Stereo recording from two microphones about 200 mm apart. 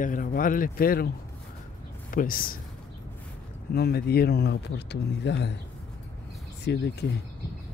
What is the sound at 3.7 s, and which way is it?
Speech, 50° left (ahead or behind).